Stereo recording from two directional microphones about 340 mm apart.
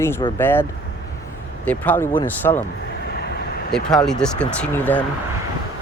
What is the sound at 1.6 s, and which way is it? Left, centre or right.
Speech, centre.